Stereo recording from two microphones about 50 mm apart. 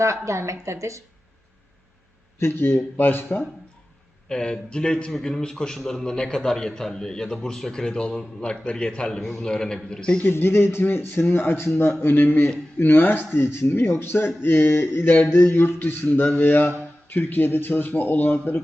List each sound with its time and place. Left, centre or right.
0.0 s speech: right
2.4 s speech: left
4.3 s a man's voice: centre
10.2 s speech: left
12.0 s speech: left
16.0 s speech: left